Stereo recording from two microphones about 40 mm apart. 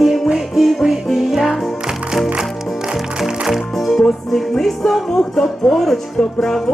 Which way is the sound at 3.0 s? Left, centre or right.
Centre.